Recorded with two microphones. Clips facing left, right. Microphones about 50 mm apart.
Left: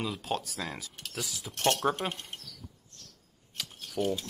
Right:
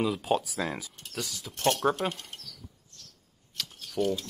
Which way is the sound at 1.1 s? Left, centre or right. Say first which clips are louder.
Right 2 dB; centre.